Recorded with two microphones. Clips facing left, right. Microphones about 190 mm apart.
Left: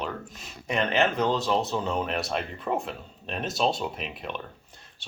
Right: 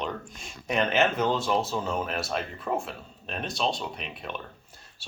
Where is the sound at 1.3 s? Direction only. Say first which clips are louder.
Left 1 dB; 20° left (ahead or behind).